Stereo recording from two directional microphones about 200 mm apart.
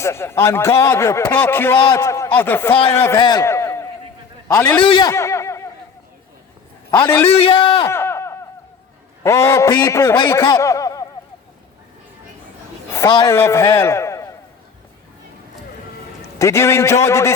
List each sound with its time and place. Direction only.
0.0 s a man's voice: 15° left (ahead or behind)
4.9 s a sound: 20° left (ahead or behind)
6.9 s a man's voice: 20° left (ahead or behind)
7.9 s a sound: 10° left (ahead or behind)
9.2 s a man's voice: 15° left (ahead or behind)
12.9 s a man's voice: 20° left (ahead or behind)
16.4 s a man's voice: 15° left (ahead or behind)